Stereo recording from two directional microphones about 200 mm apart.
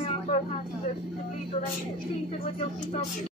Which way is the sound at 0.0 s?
30° left (ahead or behind).